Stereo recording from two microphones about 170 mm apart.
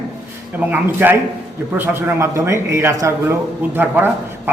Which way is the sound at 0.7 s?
10° right (ahead or behind).